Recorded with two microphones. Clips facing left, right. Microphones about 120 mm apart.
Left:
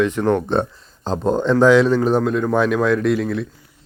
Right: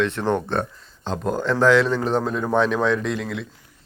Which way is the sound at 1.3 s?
20° left (ahead or behind).